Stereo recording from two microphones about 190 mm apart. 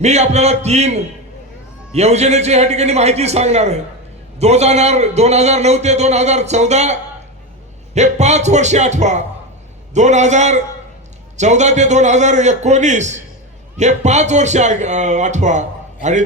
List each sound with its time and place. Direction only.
0.0 s a man's voice: 35° right (ahead or behind)